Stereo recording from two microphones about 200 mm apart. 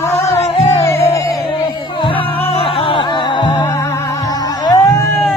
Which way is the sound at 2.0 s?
25° left (ahead or behind).